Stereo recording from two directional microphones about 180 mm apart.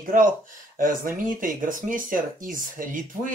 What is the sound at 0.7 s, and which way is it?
Speech, 50° right (ahead or behind).